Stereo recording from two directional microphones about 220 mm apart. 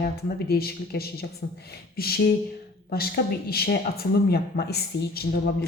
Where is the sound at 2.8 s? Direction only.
45° left (ahead or behind).